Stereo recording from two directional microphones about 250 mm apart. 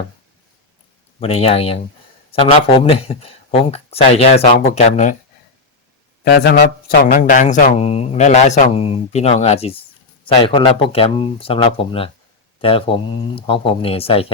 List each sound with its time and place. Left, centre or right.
1.2 s speech: left
6.2 s speech: left